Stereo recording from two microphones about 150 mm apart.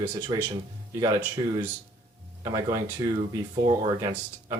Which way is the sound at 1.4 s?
30° right (ahead or behind).